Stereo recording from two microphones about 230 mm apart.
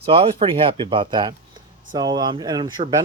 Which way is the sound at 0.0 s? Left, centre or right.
Right.